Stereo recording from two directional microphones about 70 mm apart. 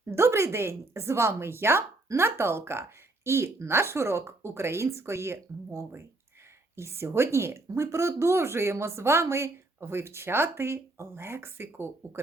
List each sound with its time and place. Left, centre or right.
0.0 s speech: right